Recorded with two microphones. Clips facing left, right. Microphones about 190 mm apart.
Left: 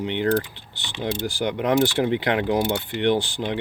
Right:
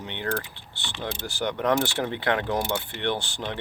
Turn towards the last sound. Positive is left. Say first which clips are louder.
# left 7 dB
turn(degrees=15)  # may be behind; listen again after turning